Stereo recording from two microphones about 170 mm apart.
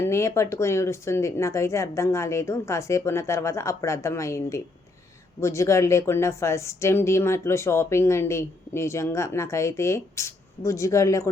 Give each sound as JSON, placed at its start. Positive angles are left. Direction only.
{"t": 0.0, "sound": "a woman's voice", "side_deg": 15}